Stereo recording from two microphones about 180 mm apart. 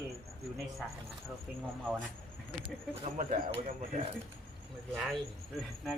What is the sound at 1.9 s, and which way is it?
Speech, 5° left (ahead or behind).